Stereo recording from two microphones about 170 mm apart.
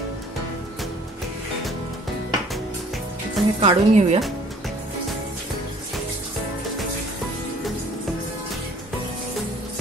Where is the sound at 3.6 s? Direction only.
40° right (ahead or behind).